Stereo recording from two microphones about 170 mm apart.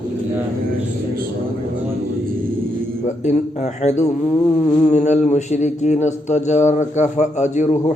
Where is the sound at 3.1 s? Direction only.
45° left (ahead or behind).